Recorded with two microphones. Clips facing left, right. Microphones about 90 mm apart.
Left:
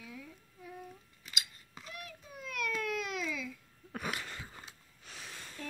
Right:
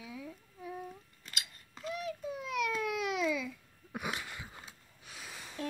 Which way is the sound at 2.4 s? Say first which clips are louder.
Right 2 dB; 15° right (ahead or behind).